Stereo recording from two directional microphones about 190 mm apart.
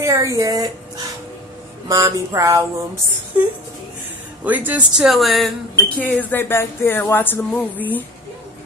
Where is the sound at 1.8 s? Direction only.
15° right (ahead or behind).